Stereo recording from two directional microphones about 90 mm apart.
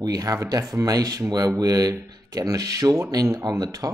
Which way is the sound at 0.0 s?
45° right (ahead or behind).